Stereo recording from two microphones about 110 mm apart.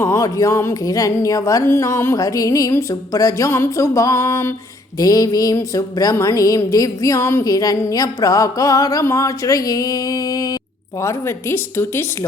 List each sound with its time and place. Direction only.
0.0 s speech: 30° left (ahead or behind)
11.0 s speech: 25° left (ahead or behind)